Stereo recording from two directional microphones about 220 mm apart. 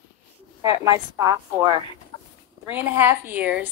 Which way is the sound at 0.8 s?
15° right (ahead or behind).